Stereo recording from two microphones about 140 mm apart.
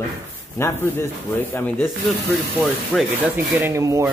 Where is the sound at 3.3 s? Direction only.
20° right (ahead or behind).